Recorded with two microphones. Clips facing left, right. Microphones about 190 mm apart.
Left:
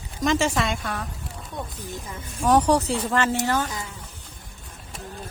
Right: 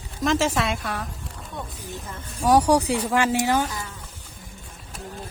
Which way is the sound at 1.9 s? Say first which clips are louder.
Left 1 dB; 10° left (ahead or behind).